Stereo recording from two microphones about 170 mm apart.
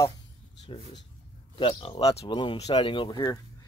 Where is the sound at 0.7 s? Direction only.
30° left (ahead or behind).